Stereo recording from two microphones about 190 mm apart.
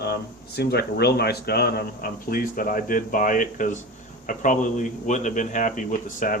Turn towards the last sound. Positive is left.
turn(degrees=45)  # may be behind; listen again after turning